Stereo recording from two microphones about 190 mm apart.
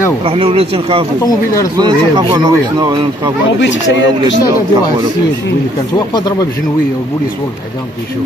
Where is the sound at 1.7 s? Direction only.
20° right (ahead or behind).